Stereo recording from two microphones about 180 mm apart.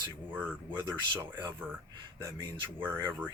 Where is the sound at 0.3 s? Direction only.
10° right (ahead or behind).